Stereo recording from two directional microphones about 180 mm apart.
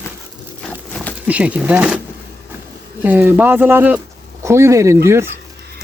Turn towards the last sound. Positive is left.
turn(degrees=-15)  # may be behind; listen again after turning